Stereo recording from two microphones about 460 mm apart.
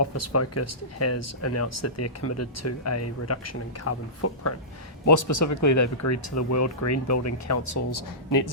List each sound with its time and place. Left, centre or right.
0.0 s speech: left